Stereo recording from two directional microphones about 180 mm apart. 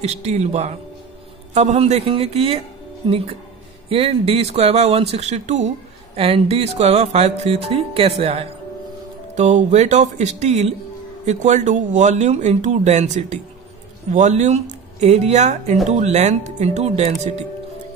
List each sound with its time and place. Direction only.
0.0 s speech: 40° right (ahead or behind)
3.9 s speech: 30° right (ahead or behind)